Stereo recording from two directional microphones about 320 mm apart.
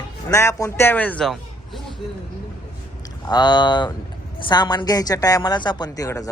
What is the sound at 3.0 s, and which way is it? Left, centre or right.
A woman's voice, centre.